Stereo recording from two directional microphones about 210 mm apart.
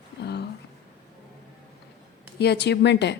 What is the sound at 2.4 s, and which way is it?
Speech, 55° left (ahead or behind).